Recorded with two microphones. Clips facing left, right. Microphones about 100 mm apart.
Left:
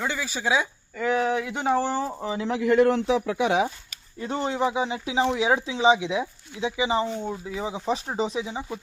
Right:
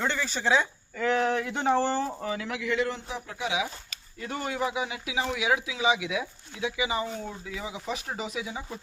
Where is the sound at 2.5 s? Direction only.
40° left (ahead or behind); by 3.5 s 75° left (ahead or behind).